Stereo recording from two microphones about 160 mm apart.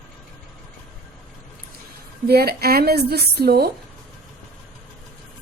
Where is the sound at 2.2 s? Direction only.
75° right (ahead or behind).